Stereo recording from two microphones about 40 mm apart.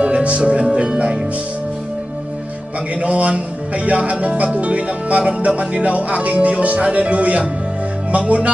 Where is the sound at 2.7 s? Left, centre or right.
Right.